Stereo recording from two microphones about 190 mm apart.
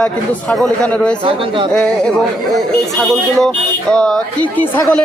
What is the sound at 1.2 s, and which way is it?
Speech, 30° right (ahead or behind).